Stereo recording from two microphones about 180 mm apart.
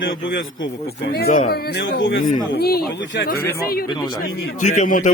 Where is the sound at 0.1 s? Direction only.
90° left.